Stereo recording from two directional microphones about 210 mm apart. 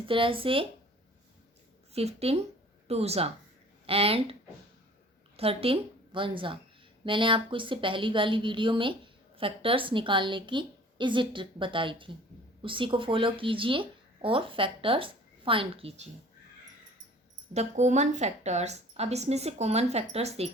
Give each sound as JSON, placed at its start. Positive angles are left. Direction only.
{"t": 0.0, "sound": "speech", "side_deg": -25}
{"t": 1.9, "sound": "speech", "side_deg": -30}
{"t": 5.4, "sound": "a woman's voice", "side_deg": -25}
{"t": 17.5, "sound": "a woman's voice", "side_deg": -35}